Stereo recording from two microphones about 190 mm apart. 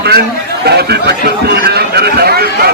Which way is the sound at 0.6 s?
60° right (ahead or behind).